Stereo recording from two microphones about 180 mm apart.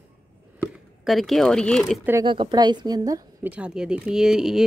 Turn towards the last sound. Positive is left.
turn(degrees=-5)  # may be behind; listen again after turning